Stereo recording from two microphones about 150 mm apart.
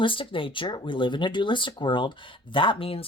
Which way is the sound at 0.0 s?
35° left (ahead or behind).